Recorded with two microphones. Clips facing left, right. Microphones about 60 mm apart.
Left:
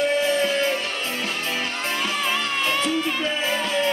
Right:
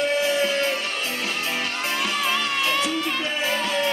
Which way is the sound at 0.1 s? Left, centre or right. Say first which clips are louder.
Left 1 dB; centre.